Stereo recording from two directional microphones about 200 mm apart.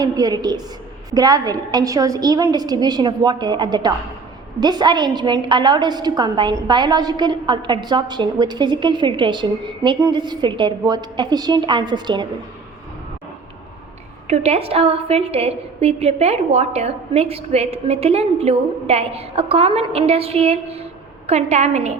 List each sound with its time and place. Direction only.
0.0 s a woman's voice: 20° right (ahead or behind)
14.3 s a woman's voice: 30° right (ahead or behind)